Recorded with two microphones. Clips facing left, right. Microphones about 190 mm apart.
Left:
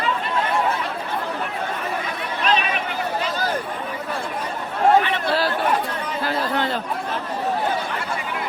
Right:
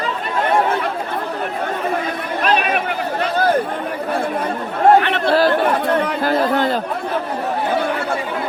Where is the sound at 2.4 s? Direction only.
55° right (ahead or behind).